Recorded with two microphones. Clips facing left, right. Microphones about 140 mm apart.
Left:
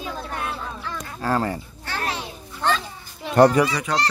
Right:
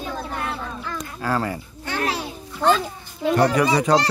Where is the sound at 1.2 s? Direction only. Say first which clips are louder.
Left 1 dB; 35° left (ahead or behind).